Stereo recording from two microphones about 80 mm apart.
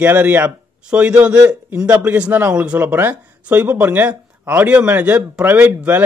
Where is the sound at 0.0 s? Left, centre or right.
Right.